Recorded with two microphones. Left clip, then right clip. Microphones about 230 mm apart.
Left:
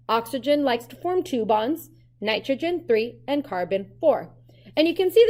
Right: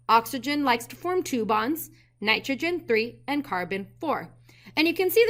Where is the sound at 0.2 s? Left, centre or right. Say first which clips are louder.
Right 1 dB; centre.